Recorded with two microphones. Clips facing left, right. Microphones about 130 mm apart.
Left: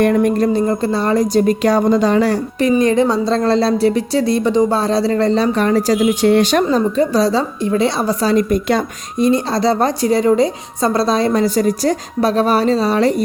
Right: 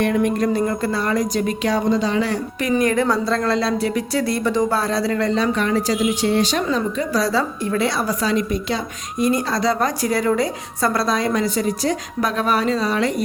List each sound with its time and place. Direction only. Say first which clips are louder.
0.0 s a woman's voice: left 5 dB; 45° left (ahead or behind)
6.3 s speech: left 6 dB; 60° left (ahead or behind)
6.7 s a woman's voice: left 6 dB; 35° left (ahead or behind)
9.1 s a woman's voice: left 5 dB; 25° left (ahead or behind)